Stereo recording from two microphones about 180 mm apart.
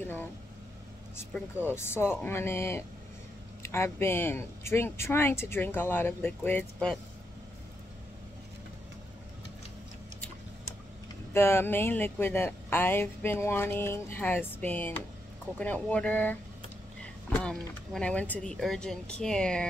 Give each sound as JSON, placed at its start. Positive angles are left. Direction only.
{"t": 0.0, "sound": "vehicle", "side_deg": 10}
{"t": 1.3, "sound": "speech", "side_deg": 10}
{"t": 11.3, "sound": "speech", "side_deg": 15}